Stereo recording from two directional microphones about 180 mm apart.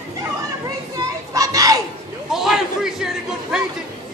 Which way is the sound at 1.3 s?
20° right (ahead or behind).